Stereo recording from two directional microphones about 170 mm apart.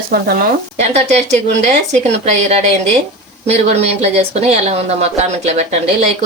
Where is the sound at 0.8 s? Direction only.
40° right (ahead or behind).